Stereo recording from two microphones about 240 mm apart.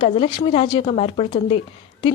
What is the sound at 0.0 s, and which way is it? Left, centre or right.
A woman's voice, left.